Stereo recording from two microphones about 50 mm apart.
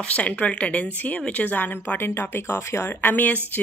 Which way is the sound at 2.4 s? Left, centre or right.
Left.